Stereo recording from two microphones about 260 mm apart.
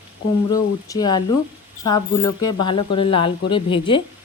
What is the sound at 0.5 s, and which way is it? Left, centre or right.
A woman's voice, centre.